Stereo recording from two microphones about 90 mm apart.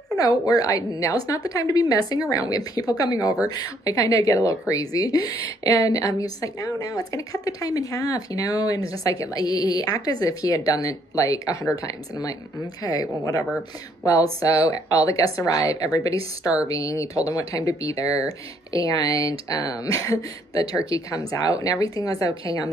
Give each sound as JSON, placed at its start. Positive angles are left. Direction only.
{"t": 0.2, "sound": "a woman's voice", "side_deg": 45}